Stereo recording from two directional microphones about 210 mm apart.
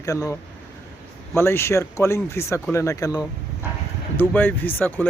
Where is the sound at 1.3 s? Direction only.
10° left (ahead or behind).